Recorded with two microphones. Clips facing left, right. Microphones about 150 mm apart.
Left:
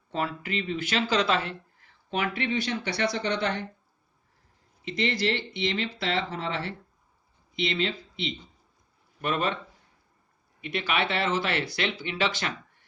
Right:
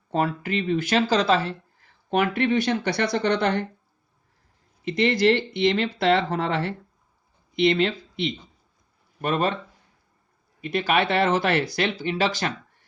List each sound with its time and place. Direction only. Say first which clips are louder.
0.1 s speech: right 6 dB; 45° right (ahead or behind)
2.0 s speech: right 7 dB; 50° right (ahead or behind)
4.9 s speech: right 8 dB; 50° right (ahead or behind)
9.2 s speech: right 4 dB; 40° right (ahead or behind)
10.6 s speech: right 6 dB; 40° right (ahead or behind)